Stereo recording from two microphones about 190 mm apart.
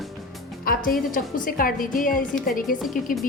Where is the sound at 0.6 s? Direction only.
50° left (ahead or behind).